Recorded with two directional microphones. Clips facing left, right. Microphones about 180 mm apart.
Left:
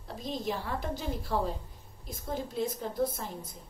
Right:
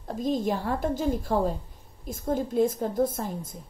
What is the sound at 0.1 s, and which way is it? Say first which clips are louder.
A woman's voice: right 8 dB; 45° right (ahead or behind).